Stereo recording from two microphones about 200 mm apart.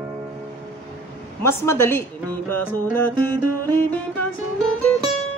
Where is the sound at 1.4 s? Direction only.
15° left (ahead or behind).